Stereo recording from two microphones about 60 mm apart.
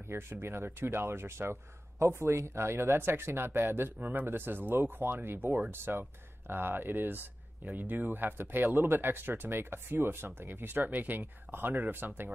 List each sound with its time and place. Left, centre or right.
0.1 s speech: right